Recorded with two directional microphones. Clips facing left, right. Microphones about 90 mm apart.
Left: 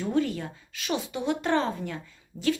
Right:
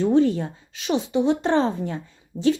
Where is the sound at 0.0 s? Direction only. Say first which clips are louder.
Right 8 dB; 30° right (ahead or behind).